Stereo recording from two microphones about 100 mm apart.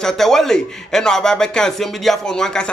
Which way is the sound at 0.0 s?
5° left (ahead or behind).